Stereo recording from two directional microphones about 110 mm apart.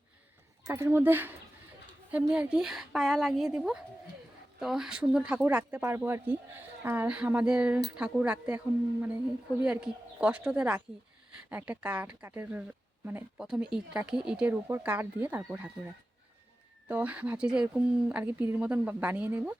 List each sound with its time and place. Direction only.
0.6 s a woman's voice: 25° right (ahead or behind)
13.4 s speech: 5° right (ahead or behind)
16.9 s speech: 15° right (ahead or behind)